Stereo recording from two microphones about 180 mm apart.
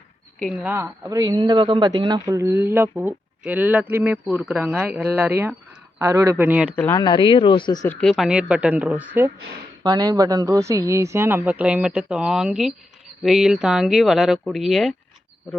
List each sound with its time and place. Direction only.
0.4 s a man's voice: 10° right (ahead or behind)
6.7 s speech: 10° left (ahead or behind)
7.9 s a man's voice: centre (ahead or behind)
9.8 s a man's voice: 20° right (ahead or behind); by 14.9 s centre (ahead or behind)